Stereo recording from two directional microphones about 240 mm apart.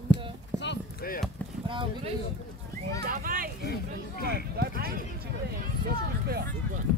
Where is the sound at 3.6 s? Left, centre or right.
Left.